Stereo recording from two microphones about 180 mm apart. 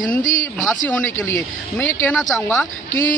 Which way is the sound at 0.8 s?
10° left (ahead or behind).